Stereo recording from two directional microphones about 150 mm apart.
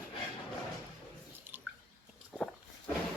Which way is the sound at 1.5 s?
15° right (ahead or behind).